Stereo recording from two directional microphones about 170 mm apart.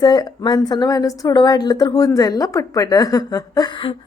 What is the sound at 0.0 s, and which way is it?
Speech, 25° left (ahead or behind).